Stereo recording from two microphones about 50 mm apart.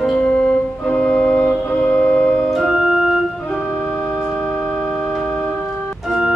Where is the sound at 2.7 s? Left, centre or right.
Centre.